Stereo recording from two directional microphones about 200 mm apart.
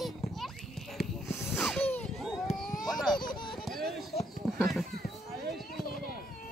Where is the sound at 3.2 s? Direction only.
20° left (ahead or behind).